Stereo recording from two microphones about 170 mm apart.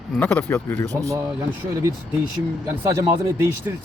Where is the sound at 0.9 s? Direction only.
20° right (ahead or behind).